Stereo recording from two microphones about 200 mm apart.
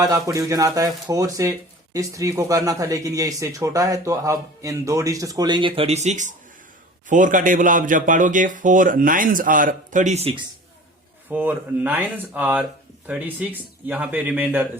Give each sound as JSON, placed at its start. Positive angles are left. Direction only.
{"t": 0.0, "sound": "speech", "side_deg": -15}
{"t": 11.3, "sound": "speech", "side_deg": -10}